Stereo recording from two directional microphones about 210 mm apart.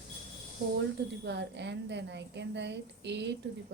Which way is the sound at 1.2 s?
55° right (ahead or behind).